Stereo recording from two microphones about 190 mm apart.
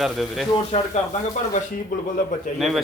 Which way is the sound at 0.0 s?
Centre (ahead or behind).